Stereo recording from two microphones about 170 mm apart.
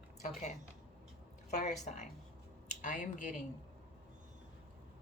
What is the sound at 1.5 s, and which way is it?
Speech, 45° left (ahead or behind).